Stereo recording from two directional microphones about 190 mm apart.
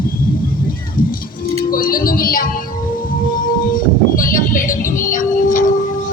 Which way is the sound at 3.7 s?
45° left (ahead or behind).